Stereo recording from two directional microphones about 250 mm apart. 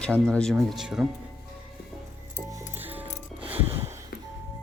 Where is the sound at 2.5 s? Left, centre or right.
Centre.